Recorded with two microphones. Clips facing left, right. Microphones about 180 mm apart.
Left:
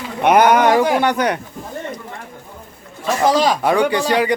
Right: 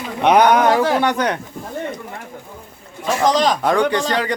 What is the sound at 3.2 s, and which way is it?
Speech, 10° left (ahead or behind).